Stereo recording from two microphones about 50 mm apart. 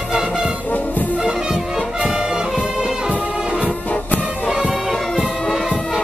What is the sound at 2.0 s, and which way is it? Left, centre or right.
Brass instrument, centre.